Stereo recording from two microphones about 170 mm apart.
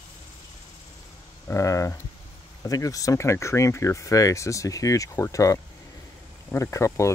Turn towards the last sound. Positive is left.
turn(degrees=15)  # may be behind; listen again after turning